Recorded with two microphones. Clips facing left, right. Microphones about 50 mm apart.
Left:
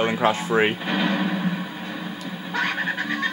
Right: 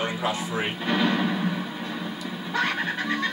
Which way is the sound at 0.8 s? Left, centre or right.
Centre.